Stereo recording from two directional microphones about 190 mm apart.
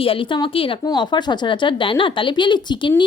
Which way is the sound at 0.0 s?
30° left (ahead or behind).